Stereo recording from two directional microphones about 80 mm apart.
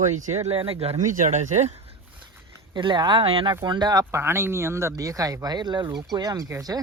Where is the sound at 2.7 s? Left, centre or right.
Right.